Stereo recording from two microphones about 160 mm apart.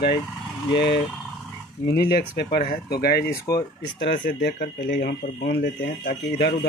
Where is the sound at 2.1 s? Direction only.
85° left.